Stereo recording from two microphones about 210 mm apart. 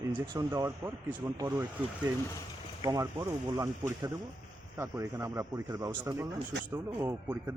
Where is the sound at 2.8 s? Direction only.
15° right (ahead or behind).